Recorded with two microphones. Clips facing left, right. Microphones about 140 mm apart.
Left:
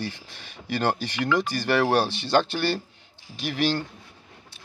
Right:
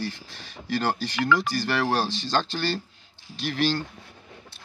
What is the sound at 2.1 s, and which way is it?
Speech, 60° left (ahead or behind).